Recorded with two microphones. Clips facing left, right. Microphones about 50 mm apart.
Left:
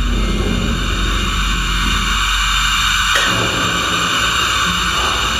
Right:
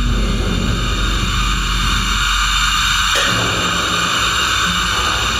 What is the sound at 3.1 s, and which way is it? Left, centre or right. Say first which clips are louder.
Music: left 1 dB; left.